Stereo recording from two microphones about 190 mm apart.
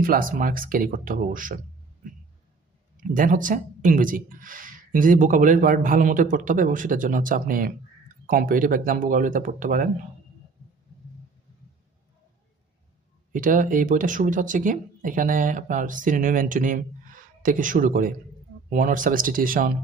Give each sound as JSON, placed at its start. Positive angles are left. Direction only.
{"t": 0.0, "sound": "speech", "side_deg": -45}
{"t": 3.0, "sound": "speech", "side_deg": -45}
{"t": 13.3, "sound": "speech", "side_deg": -45}